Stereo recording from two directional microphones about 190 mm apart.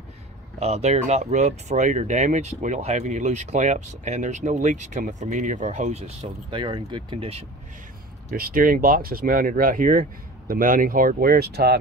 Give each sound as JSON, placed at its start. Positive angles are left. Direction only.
{"t": 0.6, "sound": "speech", "side_deg": -35}
{"t": 8.3, "sound": "speech", "side_deg": -50}